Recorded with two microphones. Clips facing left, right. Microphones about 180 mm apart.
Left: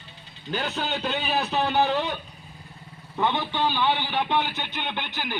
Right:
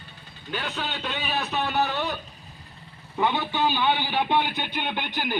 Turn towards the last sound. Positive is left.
turn(degrees=-15)  # may be behind; listen again after turning